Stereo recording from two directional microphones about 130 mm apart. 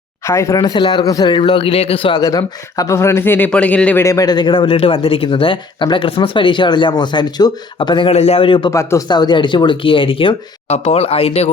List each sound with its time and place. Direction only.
0.3 s speech: 25° left (ahead or behind); by 2.2 s 40° left (ahead or behind)
2.2 s speech: 25° left (ahead or behind); by 4.0 s 10° left (ahead or behind)
4.0 s speech: 25° left (ahead or behind); by 8.7 s 40° left (ahead or behind)
8.7 s speech: 25° left (ahead or behind)
9.0 s speech: 35° left (ahead or behind); by 11.5 s 50° left (ahead or behind)